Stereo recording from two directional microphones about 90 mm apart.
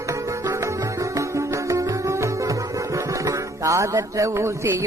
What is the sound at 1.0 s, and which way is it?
Music, 35° right (ahead or behind).